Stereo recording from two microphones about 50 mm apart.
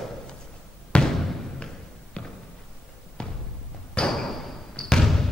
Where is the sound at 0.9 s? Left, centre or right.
Centre.